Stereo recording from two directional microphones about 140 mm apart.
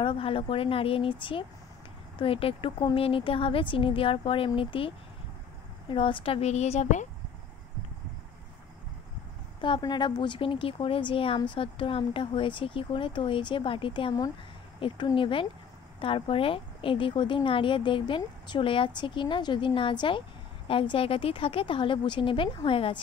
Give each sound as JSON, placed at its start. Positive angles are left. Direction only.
{"t": 0.0, "sound": "a woman's voice", "side_deg": 40}
{"t": 9.6, "sound": "a woman's voice", "side_deg": 30}